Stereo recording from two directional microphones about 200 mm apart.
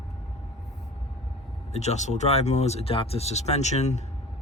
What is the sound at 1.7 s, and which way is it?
Speech, 35° left (ahead or behind).